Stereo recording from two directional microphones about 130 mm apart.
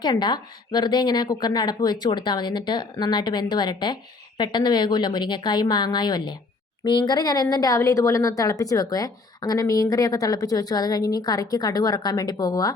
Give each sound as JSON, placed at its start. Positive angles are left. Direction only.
{"t": 0.0, "sound": "a woman's voice", "side_deg": 35}